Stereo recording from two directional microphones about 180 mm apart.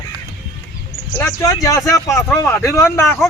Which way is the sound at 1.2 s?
15° left (ahead or behind).